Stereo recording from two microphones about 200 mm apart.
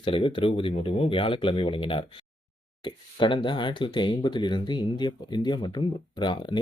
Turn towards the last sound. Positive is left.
turn(degrees=20)  # may be behind; listen again after turning